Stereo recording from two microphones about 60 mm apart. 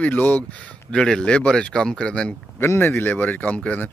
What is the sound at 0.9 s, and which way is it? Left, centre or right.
Speech, centre.